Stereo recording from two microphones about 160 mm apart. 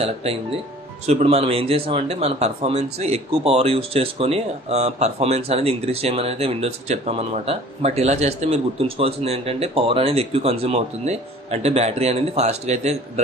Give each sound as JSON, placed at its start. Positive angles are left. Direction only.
{"t": 0.0, "sound": "speech", "side_deg": -40}